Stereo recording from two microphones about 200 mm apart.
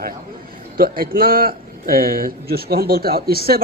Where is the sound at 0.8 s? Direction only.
45° right (ahead or behind).